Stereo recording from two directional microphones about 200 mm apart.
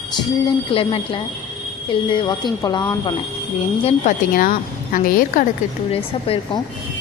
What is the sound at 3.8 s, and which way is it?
A woman's voice, 40° left (ahead or behind).